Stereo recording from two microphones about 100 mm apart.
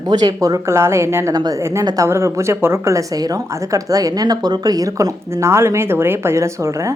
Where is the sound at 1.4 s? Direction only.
40° right (ahead or behind).